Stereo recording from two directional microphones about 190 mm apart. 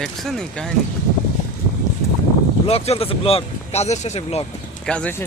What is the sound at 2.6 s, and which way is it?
Speech, 30° left (ahead or behind).